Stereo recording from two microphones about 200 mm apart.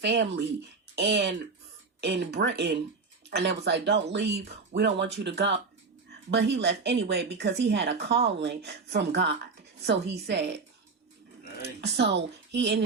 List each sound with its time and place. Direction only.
0.0 s speech: 60° right (ahead or behind)
11.8 s speech: 60° right (ahead or behind)